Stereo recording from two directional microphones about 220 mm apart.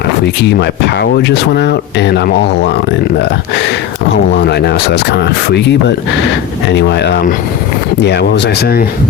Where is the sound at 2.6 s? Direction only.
50° left (ahead or behind).